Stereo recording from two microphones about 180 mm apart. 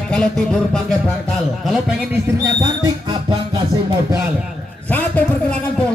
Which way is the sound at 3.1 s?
30° right (ahead or behind).